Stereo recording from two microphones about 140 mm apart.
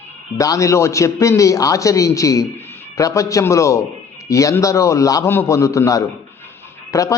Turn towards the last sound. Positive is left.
turn(degrees=25)  # may be behind; listen again after turning